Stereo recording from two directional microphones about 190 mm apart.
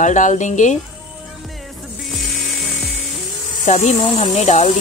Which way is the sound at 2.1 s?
Centre (ahead or behind).